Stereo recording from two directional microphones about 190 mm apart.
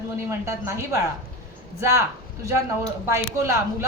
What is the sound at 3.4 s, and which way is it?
Speech, 15° right (ahead or behind).